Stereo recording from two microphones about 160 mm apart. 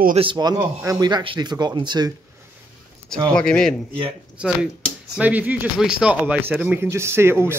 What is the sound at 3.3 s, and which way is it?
Speech, 5° left (ahead or behind).